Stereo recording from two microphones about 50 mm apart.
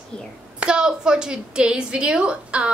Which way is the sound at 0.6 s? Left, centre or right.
Centre.